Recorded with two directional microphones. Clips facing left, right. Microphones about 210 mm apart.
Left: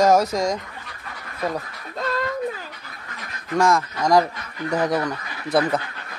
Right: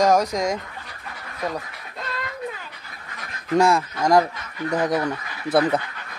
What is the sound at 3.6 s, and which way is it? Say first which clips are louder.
Speech: right 1 dB; 15° right (ahead or behind).